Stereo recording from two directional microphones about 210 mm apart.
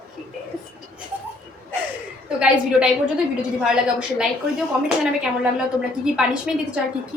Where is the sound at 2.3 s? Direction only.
5° right (ahead or behind).